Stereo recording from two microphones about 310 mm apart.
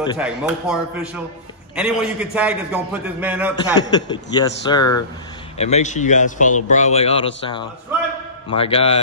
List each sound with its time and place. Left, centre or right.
0.2 s a man's voice: centre
3.7 s a man's voice: centre